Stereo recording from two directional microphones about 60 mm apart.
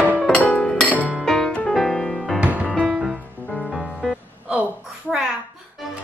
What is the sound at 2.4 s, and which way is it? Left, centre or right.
Music, right.